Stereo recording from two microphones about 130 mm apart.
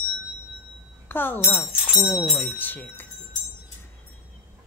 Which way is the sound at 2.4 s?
15° left (ahead or behind).